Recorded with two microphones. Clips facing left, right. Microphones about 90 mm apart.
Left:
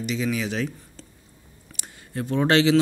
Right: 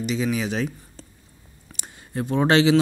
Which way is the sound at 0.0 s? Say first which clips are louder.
Right 2 dB; 20° right (ahead or behind).